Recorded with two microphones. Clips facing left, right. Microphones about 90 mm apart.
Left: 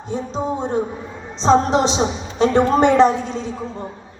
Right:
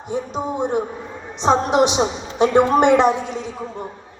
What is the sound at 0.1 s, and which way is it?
A man's voice, 15° right (ahead or behind).